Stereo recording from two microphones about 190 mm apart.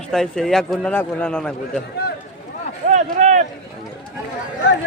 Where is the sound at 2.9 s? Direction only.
40° right (ahead or behind).